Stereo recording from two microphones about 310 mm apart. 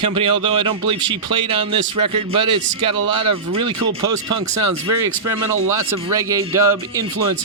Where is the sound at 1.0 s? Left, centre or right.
Centre.